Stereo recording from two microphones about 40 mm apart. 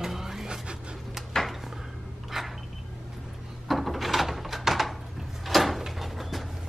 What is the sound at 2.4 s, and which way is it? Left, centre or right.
Vehicle, centre.